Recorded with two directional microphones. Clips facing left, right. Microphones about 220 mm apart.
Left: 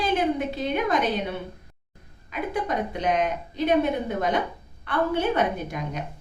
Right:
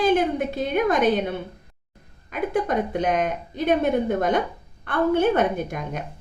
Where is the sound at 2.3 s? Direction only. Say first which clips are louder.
Right 4 dB; 50° right (ahead or behind).